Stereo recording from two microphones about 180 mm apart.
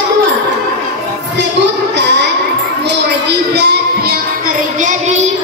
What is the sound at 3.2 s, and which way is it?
Music, 65° right (ahead or behind).